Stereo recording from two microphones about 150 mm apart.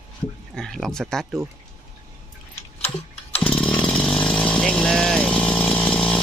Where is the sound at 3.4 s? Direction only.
10° left (ahead or behind).